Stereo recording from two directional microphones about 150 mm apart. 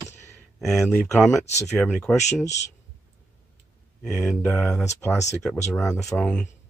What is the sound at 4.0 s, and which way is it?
Speech, centre (ahead or behind).